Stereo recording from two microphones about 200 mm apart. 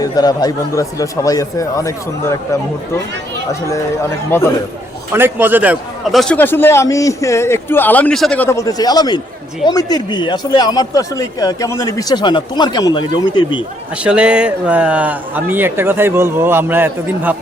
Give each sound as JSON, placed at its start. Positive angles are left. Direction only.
{"t": 0.0, "sound": "a man's voice", "side_deg": 20}
{"t": 4.3, "sound": "a man's voice", "side_deg": 10}
{"t": 5.1, "sound": "a man's voice", "side_deg": -10}
{"t": 14.0, "sound": "speech", "side_deg": -5}